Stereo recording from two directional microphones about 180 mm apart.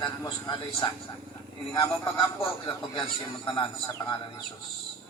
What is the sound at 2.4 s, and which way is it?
Speech, 30° left (ahead or behind).